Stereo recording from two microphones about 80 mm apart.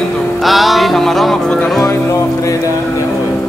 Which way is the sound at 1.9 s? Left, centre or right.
Left.